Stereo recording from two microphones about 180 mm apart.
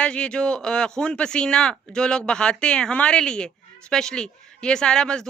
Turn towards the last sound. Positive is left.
turn(degrees=5)  # may be behind; listen again after turning